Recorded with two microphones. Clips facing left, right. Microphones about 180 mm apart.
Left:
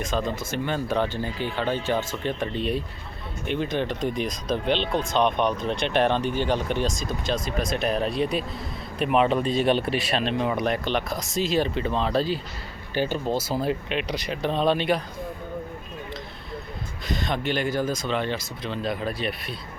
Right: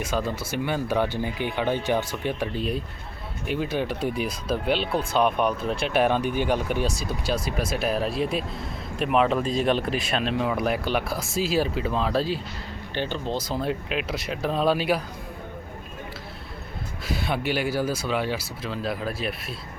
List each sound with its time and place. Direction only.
0.0 s speech: 10° right (ahead or behind)
12.9 s speech: 10° left (ahead or behind)
17.1 s speech: 10° right (ahead or behind)